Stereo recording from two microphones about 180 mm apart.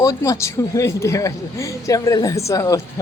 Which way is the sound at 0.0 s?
20° left (ahead or behind).